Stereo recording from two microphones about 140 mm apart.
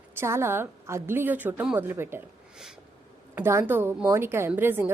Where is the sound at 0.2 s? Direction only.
20° right (ahead or behind).